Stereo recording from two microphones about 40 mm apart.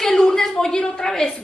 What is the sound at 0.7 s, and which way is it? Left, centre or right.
Speech, left.